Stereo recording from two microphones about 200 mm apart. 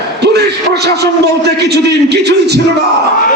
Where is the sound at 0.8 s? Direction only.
55° right (ahead or behind).